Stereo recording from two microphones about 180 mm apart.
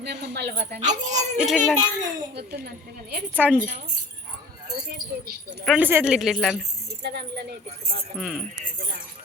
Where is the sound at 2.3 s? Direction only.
65° right (ahead or behind).